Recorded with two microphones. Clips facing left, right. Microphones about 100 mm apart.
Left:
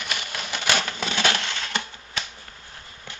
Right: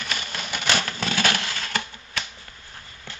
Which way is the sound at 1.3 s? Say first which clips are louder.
Even; 5° right (ahead or behind).